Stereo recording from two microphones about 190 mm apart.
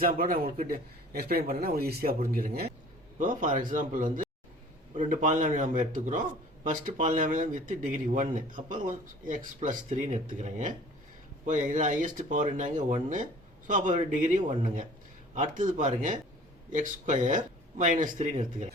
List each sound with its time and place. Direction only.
0.0 s speech: 50° right (ahead or behind)